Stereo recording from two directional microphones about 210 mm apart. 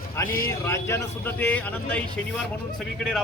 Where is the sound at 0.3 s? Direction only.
40° left (ahead or behind).